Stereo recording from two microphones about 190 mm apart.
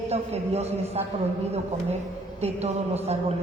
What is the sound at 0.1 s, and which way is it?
A woman's voice, 35° right (ahead or behind).